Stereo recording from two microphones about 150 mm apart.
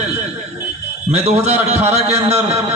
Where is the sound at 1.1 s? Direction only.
45° right (ahead or behind).